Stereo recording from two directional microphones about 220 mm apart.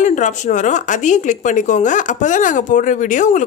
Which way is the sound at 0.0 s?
35° left (ahead or behind).